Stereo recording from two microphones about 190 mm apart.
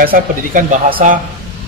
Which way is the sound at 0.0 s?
45° right (ahead or behind).